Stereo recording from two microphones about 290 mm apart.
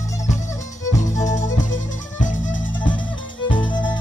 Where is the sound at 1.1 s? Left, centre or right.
Left.